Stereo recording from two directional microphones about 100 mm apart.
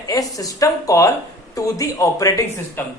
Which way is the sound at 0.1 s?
35° left (ahead or behind).